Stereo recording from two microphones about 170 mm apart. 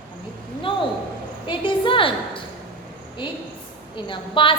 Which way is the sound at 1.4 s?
30° left (ahead or behind).